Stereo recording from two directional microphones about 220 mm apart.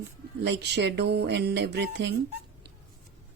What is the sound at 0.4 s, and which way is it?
Speech, 50° right (ahead or behind).